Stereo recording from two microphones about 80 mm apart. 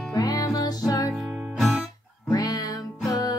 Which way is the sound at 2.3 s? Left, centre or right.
Left.